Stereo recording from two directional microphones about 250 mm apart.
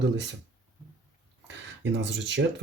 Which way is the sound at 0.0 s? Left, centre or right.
Right.